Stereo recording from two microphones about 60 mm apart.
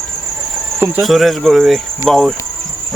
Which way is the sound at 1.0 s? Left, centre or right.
Centre.